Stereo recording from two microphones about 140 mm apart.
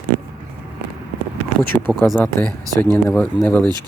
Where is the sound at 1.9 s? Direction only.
10° left (ahead or behind).